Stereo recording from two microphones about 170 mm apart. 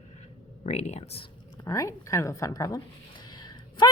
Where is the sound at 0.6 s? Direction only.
40° left (ahead or behind).